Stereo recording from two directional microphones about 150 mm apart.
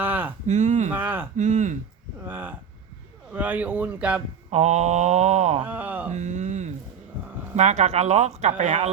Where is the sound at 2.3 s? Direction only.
10° right (ahead or behind).